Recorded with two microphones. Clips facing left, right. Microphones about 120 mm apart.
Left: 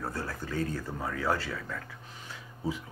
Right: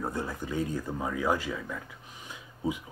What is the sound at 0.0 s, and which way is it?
Speech, 20° right (ahead or behind).